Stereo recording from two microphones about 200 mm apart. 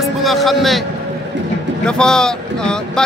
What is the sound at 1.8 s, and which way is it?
Speech, 5° left (ahead or behind).